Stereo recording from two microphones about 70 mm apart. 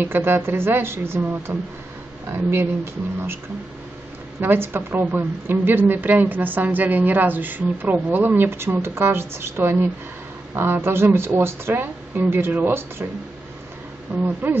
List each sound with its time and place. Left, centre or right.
0.0 s speech: right
1.2 s a woman's voice: right
4.4 s a woman's voice: right
14.2 s a woman's voice: right